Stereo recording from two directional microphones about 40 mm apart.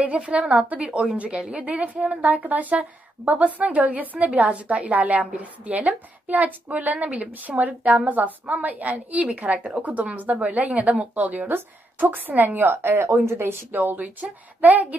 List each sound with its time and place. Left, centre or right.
0.0 s a woman's voice: right
2.2 s a woman's voice: right
8.2 s a woman's voice: right
13.7 s speech: right